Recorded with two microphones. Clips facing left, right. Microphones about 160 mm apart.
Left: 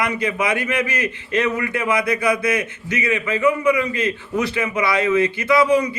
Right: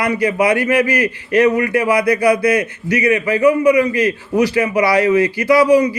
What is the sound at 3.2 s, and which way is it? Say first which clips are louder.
Speech: right 4 dB; 35° right (ahead or behind).